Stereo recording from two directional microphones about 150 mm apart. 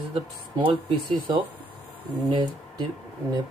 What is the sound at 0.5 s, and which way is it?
Speech, 35° right (ahead or behind).